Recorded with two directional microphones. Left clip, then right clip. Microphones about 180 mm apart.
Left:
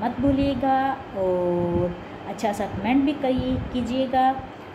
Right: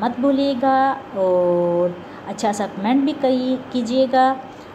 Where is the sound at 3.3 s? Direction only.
5° left (ahead or behind).